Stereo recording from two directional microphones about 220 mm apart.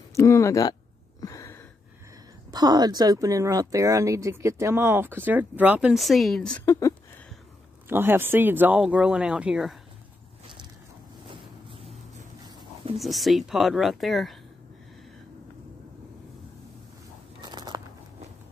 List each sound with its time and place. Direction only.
0.1 s speech: 15° left (ahead or behind)
1.2 s a sound: 15° left (ahead or behind)
2.5 s speech: 20° right (ahead or behind); by 6.7 s 5° left (ahead or behind)
7.9 s speech: 10° right (ahead or behind)
12.9 s speech: centre (ahead or behind)
17.4 s a sound: 20° right (ahead or behind)